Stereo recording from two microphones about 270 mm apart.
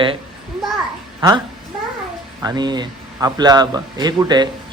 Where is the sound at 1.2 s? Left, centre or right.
Centre.